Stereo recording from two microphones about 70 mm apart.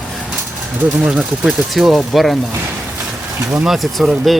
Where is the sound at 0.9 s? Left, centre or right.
Centre.